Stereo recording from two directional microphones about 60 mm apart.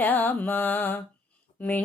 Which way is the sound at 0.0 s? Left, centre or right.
Left.